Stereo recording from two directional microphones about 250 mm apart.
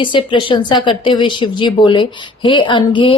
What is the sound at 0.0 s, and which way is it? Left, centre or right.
Speech, centre.